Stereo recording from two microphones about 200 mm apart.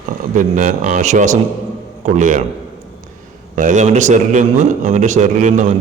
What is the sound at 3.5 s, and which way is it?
A man's voice, 40° right (ahead or behind).